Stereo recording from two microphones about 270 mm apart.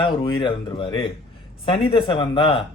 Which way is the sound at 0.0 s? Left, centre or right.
Centre.